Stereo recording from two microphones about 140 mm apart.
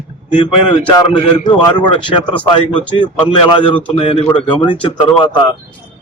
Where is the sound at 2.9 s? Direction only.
30° left (ahead or behind).